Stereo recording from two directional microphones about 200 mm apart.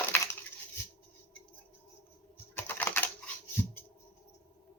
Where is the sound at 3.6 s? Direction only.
10° left (ahead or behind).